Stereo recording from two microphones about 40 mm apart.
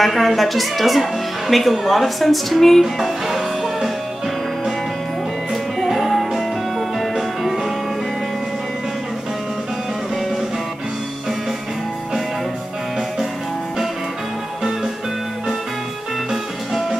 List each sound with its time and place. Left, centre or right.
0.0 s speech: centre
5.5 s music: centre